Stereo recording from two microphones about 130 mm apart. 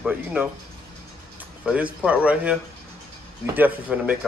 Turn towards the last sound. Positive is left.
turn(degrees=-10)  # may be behind; listen again after turning